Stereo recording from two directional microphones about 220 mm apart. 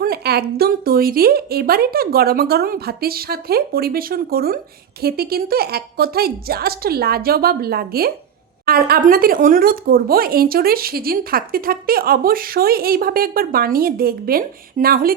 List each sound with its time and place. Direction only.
0.0 s a woman's voice: 45° right (ahead or behind)